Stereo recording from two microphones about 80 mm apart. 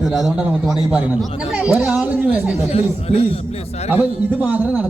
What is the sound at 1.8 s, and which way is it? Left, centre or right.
Speech, centre.